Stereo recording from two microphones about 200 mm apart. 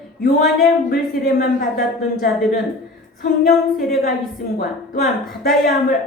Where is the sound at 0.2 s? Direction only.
45° left (ahead or behind).